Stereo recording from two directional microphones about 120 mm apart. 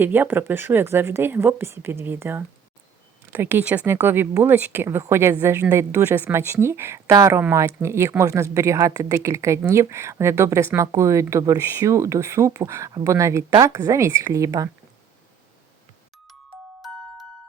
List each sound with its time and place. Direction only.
0.0 s a woman's voice: 15° right (ahead or behind)